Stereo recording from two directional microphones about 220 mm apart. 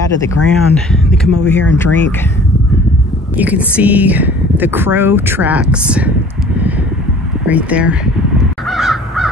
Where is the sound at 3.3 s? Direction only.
5° right (ahead or behind).